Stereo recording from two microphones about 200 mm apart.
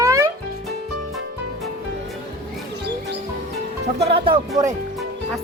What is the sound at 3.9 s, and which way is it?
Music, 30° right (ahead or behind).